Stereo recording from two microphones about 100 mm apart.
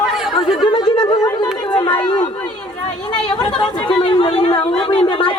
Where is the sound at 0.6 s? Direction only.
50° left (ahead or behind).